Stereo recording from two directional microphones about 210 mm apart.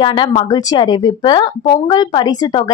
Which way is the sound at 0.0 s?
25° left (ahead or behind).